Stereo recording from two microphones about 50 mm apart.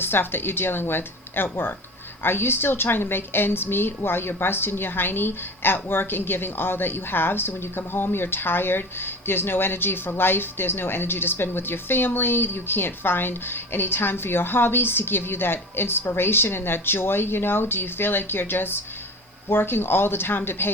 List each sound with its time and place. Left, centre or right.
0.0 s a woman's voice: left